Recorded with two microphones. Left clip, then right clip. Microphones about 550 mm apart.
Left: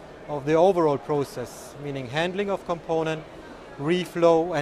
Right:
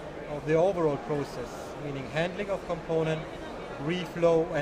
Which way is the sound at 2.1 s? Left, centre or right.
Left.